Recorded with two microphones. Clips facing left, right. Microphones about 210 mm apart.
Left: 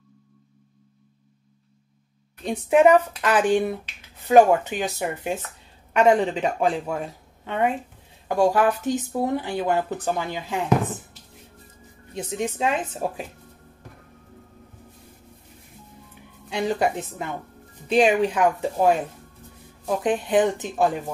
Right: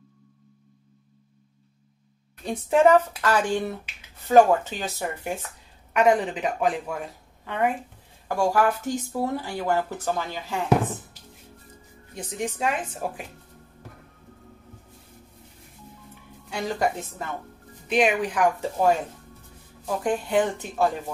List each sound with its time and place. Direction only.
2.4 s speech: 15° left (ahead or behind)
12.1 s speech: 25° left (ahead or behind)
16.4 s speech: 20° left (ahead or behind)
17.8 s speech: 30° left (ahead or behind)
20.0 s speech: 20° left (ahead or behind)